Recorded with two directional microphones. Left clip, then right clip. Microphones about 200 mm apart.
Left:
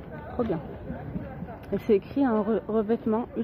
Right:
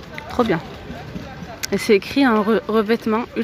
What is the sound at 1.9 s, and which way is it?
Speech, 15° right (ahead or behind).